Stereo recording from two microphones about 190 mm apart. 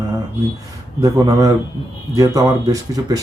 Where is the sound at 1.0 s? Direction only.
20° right (ahead or behind).